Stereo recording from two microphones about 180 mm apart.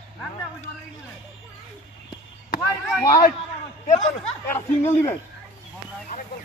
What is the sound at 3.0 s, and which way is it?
Speech, 20° left (ahead or behind).